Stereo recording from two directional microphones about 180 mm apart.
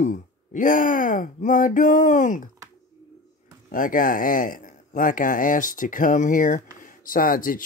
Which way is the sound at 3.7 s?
50° left (ahead or behind).